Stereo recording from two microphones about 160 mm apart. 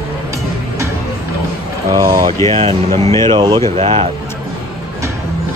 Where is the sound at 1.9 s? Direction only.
20° right (ahead or behind).